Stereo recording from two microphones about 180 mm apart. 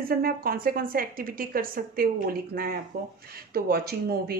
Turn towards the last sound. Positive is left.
turn(degrees=-60)  # may be behind; listen again after turning